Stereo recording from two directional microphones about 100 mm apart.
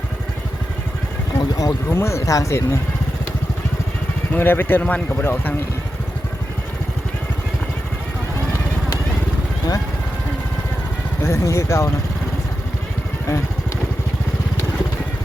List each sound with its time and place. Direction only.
1.4 s boat: 35° left (ahead or behind)
1.9 s speech: 25° left (ahead or behind)
4.3 s speech: 20° left (ahead or behind)
11.2 s speech: 25° left (ahead or behind)